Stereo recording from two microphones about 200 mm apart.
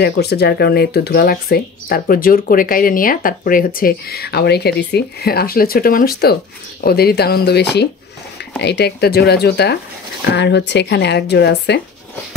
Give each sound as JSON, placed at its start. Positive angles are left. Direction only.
{"t": 0.0, "sound": "a woman's voice", "side_deg": 55}